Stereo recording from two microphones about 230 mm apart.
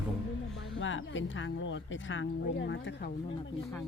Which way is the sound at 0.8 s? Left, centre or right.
Left.